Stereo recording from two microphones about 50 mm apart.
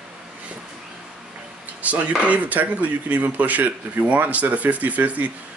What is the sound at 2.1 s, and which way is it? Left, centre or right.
Speech, right.